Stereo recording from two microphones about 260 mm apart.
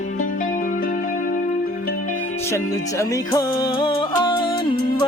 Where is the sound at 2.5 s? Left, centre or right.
Centre.